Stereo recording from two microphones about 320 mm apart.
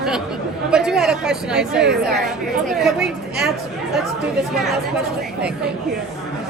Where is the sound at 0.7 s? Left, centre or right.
Centre.